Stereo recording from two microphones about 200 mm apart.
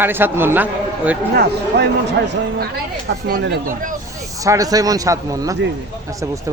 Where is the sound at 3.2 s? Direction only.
50° right (ahead or behind).